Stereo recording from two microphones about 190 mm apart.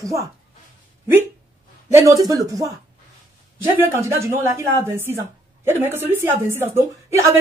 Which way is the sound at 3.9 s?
15° right (ahead or behind).